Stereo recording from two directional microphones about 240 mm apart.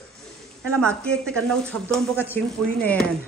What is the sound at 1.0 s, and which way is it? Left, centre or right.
Speech, centre.